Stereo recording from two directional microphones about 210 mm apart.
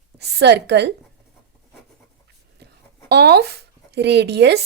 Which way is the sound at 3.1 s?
50° right (ahead or behind).